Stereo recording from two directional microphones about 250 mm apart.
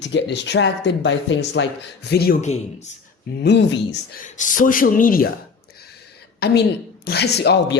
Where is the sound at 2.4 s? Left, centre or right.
Left.